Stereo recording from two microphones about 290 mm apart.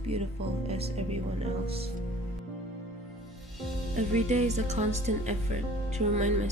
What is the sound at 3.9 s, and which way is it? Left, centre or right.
Speech, right.